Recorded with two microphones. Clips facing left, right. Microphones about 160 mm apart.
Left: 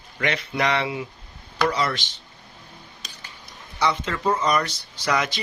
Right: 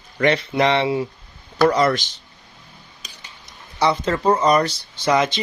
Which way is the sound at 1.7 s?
45° right (ahead or behind).